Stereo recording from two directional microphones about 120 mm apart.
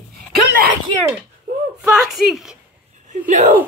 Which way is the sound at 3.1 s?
90° right.